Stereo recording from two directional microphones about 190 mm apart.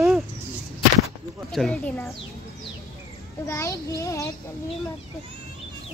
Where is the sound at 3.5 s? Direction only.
15° left (ahead or behind).